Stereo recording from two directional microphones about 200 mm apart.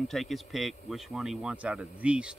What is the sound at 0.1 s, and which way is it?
Speech, centre (ahead or behind).